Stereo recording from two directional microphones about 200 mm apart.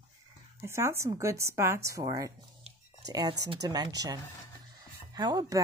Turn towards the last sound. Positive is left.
turn(degrees=-20)  # may be behind; listen again after turning